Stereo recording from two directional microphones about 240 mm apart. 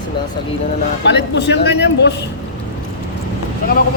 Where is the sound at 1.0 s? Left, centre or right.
Left.